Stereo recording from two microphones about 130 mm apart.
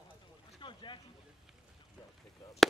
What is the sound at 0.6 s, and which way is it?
Boat, 40° left (ahead or behind).